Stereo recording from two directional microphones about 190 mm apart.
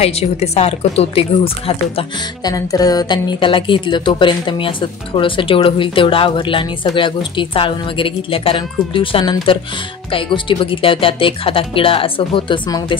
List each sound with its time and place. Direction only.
0.0 s a woman's voice: 35° left (ahead or behind)
2.0 s speech: 20° left (ahead or behind)